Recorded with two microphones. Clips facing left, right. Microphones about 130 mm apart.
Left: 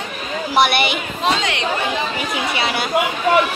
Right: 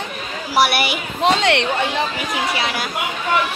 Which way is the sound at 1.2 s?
65° right (ahead or behind).